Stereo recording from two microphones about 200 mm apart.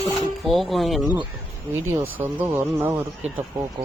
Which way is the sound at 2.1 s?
10° right (ahead or behind).